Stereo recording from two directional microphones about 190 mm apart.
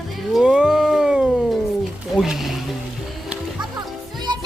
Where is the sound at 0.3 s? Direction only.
5° right (ahead or behind).